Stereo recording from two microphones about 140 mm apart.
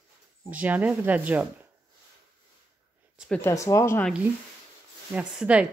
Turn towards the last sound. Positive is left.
turn(degrees=-10)  # may be behind; listen again after turning